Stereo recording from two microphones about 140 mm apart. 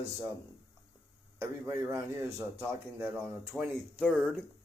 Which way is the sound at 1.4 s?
20° right (ahead or behind).